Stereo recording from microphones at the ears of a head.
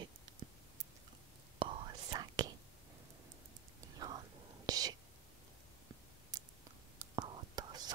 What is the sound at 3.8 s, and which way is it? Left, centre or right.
Whispering, right.